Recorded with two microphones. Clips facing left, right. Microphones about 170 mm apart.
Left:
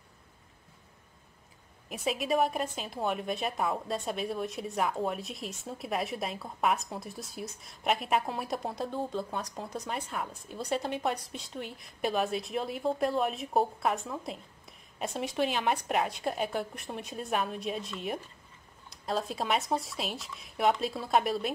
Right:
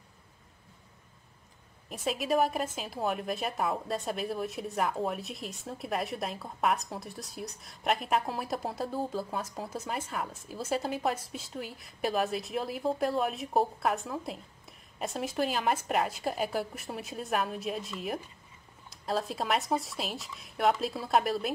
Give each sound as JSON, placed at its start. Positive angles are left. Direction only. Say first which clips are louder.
{"t": 1.9, "sound": "a woman's voice", "louder": "even", "side_deg": 0}